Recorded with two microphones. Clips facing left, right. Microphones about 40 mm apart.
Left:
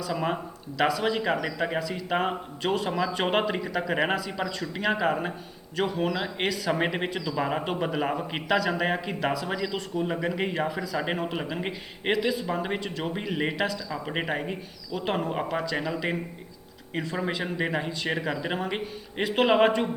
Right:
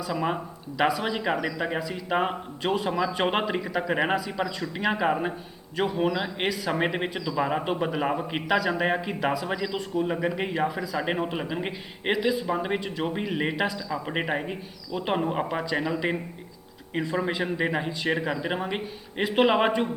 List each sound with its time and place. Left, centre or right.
0.1 s speech: centre
0.8 s speech: centre
15.4 s speech: centre